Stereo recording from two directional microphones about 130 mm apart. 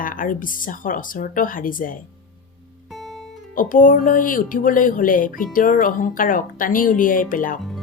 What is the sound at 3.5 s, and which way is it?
Speech, 90° left.